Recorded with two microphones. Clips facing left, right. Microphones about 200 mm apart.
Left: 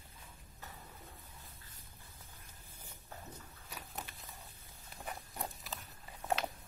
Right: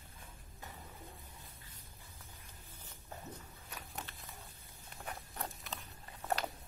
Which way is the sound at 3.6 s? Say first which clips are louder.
Left 1 dB; centre (ahead or behind).